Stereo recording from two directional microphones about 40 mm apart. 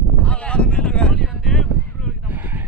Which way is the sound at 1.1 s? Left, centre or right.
Centre.